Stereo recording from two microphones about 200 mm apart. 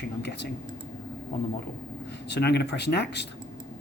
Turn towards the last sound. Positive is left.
turn(degrees=55)  # may be behind; listen again after turning